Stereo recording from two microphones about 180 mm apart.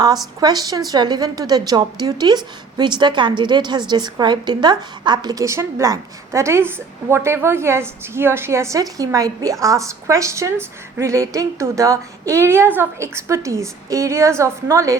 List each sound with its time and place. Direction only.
0.3 s a woman's voice: 20° right (ahead or behind)